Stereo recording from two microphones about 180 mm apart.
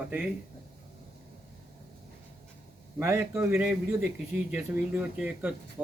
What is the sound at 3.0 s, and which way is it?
Speech, 10° right (ahead or behind).